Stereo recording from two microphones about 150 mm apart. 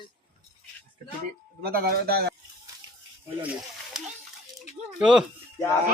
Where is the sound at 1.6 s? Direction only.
85° right.